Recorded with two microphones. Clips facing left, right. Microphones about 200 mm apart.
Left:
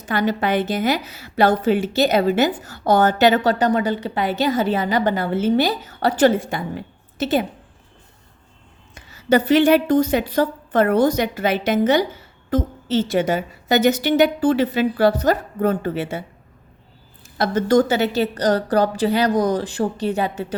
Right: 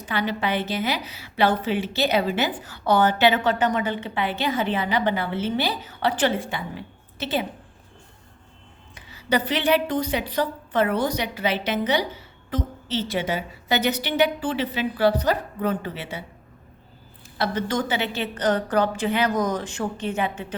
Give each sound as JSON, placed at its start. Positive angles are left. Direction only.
{"t": 0.0, "sound": "a woman's voice", "side_deg": 45}
{"t": 9.0, "sound": "a woman's voice", "side_deg": 45}
{"t": 17.3, "sound": "a woman's voice", "side_deg": 45}